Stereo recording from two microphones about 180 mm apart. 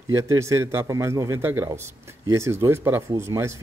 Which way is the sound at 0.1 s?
15° right (ahead or behind).